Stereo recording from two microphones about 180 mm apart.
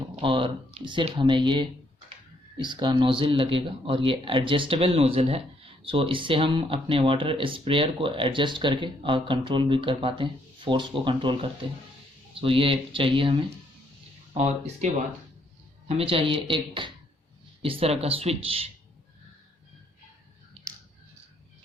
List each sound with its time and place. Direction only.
0.2 s speech: 30° right (ahead or behind)
15.9 s speech: 30° right (ahead or behind)